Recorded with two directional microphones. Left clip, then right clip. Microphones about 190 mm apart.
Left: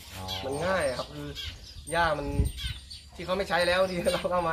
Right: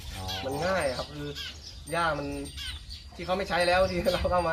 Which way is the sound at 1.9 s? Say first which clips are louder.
Left 2 dB; 15° left (ahead or behind).